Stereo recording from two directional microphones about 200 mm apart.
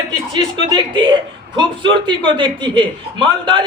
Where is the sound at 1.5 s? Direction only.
25° right (ahead or behind).